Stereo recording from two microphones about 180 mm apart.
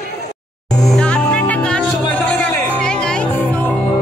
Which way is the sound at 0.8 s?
5° left (ahead or behind).